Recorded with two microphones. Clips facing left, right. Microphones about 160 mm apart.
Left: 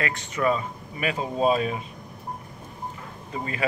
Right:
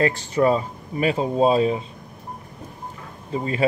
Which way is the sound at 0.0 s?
30° right (ahead or behind).